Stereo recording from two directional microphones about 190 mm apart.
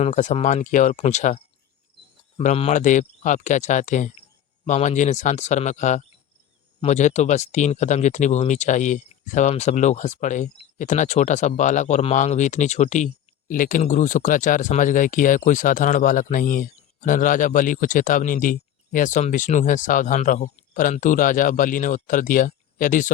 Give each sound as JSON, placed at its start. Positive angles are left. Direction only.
{"t": 0.0, "sound": "speech", "side_deg": 35}
{"t": 2.4, "sound": "speech", "side_deg": 35}